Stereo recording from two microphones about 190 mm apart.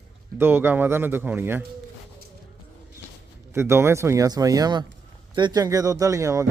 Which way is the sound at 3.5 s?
15° right (ahead or behind).